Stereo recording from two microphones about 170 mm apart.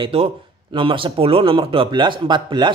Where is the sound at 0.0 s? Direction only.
35° right (ahead or behind).